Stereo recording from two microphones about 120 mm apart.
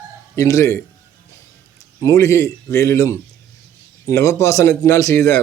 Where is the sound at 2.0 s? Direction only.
25° left (ahead or behind).